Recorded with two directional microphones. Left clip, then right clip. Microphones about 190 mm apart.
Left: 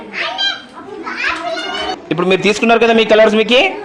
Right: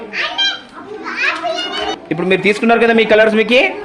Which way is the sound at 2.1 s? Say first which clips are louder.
Left 1 dB; 10° left (ahead or behind).